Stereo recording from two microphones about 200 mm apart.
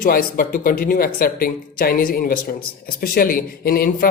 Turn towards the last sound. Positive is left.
turn(degrees=45)  # may be behind; listen again after turning